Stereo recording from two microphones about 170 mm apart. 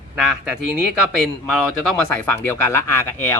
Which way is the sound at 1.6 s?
Centre (ahead or behind).